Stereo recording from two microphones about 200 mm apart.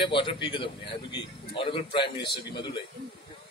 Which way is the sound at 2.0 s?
55° left (ahead or behind).